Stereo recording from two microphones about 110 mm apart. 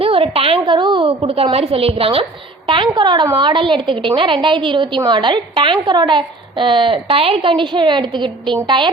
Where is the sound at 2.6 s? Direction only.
50° right (ahead or behind).